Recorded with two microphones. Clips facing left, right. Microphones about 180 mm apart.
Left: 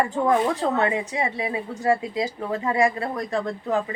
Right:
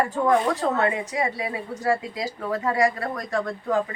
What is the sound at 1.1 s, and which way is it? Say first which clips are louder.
A woman's voice: left 1 dB; 25° left (ahead or behind).